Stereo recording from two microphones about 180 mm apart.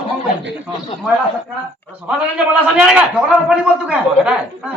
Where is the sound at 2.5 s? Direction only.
5° right (ahead or behind).